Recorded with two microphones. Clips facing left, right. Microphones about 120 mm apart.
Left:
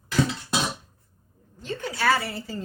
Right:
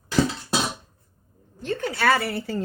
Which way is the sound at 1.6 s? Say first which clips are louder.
Right 2 dB; 55° right (ahead or behind).